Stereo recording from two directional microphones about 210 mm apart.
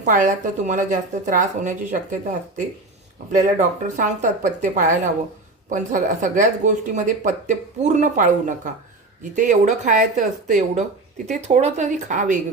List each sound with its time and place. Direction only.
0.0 s speech: 35° right (ahead or behind)
3.3 s speech: 35° right (ahead or behind)